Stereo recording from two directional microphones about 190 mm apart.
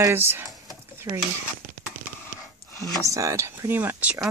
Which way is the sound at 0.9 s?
15° right (ahead or behind).